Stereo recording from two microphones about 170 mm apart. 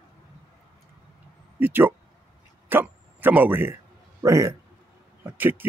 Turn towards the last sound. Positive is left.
turn(degrees=-10)  # may be behind; listen again after turning